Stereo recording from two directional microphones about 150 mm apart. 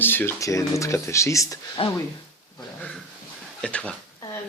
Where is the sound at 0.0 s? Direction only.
15° left (ahead or behind).